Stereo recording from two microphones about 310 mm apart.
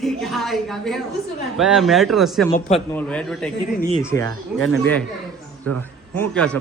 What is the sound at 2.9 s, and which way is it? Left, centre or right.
Speech, centre.